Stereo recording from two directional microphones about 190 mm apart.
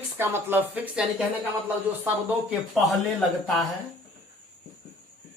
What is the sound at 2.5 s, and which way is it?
Speech, centre (ahead or behind).